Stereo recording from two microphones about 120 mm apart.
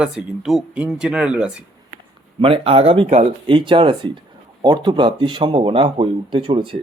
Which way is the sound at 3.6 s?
45° right (ahead or behind).